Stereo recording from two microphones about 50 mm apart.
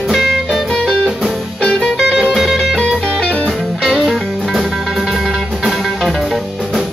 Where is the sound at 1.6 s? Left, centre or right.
Centre.